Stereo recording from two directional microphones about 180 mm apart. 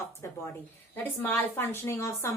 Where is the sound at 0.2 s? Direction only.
15° left (ahead or behind).